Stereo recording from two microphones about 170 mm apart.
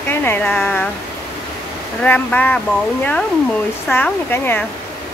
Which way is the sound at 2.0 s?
10° left (ahead or behind).